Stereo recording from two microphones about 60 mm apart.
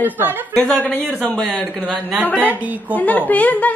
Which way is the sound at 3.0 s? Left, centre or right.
Left.